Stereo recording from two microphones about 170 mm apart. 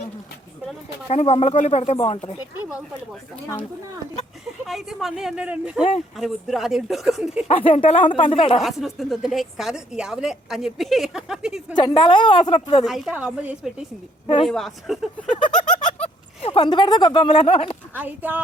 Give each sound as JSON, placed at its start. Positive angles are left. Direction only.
{"t": 1.0, "sound": "speech", "side_deg": 35}
{"t": 4.6, "sound": "a woman's voice", "side_deg": 0}
{"t": 7.4, "sound": "speech", "side_deg": 35}
{"t": 8.6, "sound": "a woman's voice", "side_deg": 0}
{"t": 11.7, "sound": "a woman's voice", "side_deg": 25}
{"t": 12.8, "sound": "a woman's voice", "side_deg": -5}
{"t": 15.8, "sound": "fowl", "side_deg": 40}
{"t": 17.3, "sound": "speech", "side_deg": 35}
{"t": 17.9, "sound": "speech", "side_deg": -10}